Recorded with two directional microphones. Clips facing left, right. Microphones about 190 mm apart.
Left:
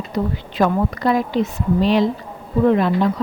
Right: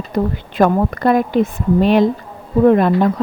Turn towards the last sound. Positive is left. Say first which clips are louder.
# right 4 dB
turn(degrees=-50)  # may be behind; listen again after turning